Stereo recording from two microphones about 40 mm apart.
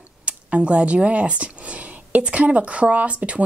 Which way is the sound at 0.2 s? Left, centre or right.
Right.